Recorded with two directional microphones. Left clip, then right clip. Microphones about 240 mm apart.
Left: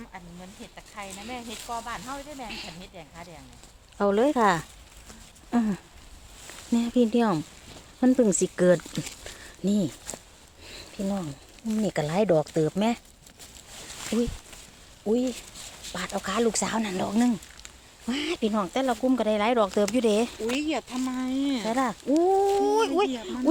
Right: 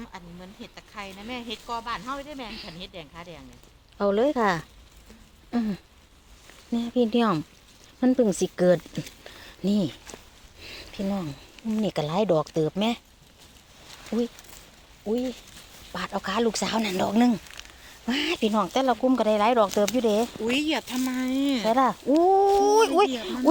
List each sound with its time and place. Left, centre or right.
0.6 s speech: right
2.5 s speech: centre
2.8 s speech: right
3.9 s speech: centre
7.2 s speech: centre
9.2 s a sound: centre
11.8 s speech: centre
14.1 s speech: centre
15.0 s speech: left
15.9 s speech: centre
19.7 s speech: centre
20.5 s speech: right
21.7 s speech: centre